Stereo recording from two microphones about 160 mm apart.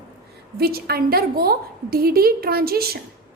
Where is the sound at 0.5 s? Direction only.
75° right (ahead or behind).